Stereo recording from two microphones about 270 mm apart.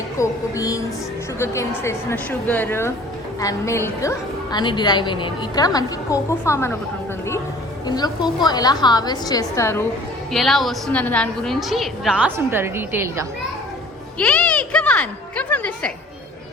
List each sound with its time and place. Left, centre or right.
0.2 s a woman's voice: centre
7.9 s a woman's voice: centre
14.2 s a woman's voice: centre